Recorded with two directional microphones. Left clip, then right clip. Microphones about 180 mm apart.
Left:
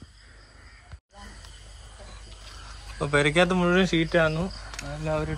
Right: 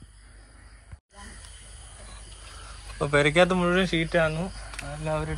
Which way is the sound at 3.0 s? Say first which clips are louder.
Right 1 dB; 10° left (ahead or behind).